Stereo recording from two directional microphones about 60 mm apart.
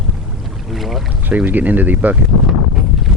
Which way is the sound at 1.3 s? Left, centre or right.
Right.